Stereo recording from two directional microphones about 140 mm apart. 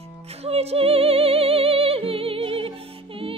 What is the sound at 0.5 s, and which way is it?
Music, 45° right (ahead or behind).